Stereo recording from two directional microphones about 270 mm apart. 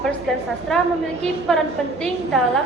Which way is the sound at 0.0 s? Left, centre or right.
Centre.